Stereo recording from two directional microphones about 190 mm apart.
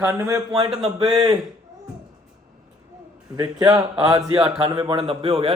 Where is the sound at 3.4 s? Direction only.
25° right (ahead or behind).